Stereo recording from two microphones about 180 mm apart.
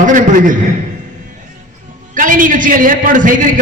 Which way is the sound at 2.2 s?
50° right (ahead or behind).